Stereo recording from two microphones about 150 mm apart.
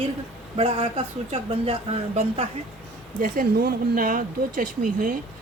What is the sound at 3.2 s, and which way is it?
Speech, 70° right (ahead or behind).